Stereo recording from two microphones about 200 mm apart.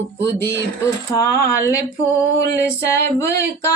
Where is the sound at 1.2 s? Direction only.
15° left (ahead or behind).